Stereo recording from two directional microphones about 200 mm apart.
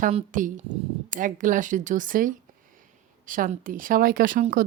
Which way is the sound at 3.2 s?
45° right (ahead or behind).